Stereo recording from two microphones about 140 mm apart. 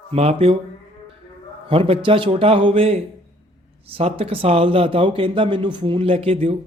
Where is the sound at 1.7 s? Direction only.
40° right (ahead or behind).